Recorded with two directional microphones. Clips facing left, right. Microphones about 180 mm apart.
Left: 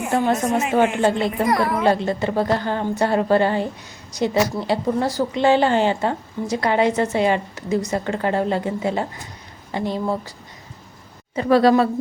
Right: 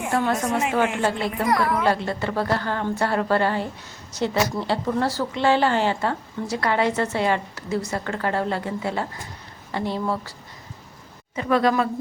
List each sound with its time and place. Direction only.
0.1 s a woman's voice: 20° left (ahead or behind)
11.3 s a woman's voice: 35° left (ahead or behind)